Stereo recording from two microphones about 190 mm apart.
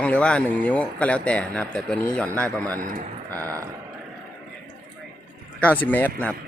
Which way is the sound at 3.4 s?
15° right (ahead or behind).